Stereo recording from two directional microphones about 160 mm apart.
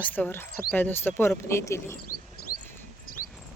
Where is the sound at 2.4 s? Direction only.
75° left (ahead or behind).